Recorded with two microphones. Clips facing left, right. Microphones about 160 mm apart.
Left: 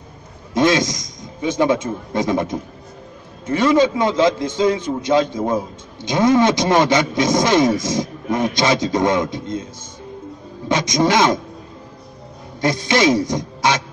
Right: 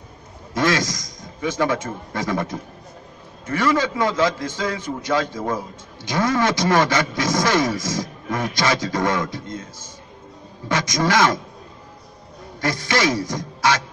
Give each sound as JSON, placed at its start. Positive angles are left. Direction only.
{"t": 0.6, "sound": "a man's voice", "side_deg": 20}
{"t": 12.5, "sound": "speech", "side_deg": 20}